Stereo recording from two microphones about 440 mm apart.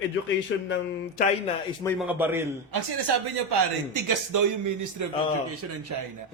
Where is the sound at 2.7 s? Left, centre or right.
Right.